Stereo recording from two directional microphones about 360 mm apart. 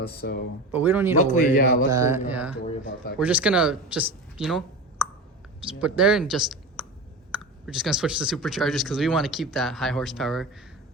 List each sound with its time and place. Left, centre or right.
0.0 s speech: left
0.7 s speech: centre
1.2 s speech: left
1.9 s mantra: centre
3.2 s speech: centre